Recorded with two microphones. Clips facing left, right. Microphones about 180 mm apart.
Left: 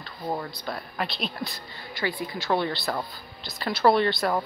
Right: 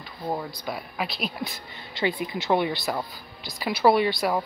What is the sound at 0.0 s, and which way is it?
Speech, 10° right (ahead or behind).